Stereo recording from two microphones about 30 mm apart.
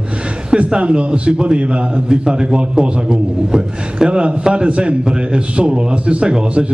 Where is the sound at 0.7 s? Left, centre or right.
Right.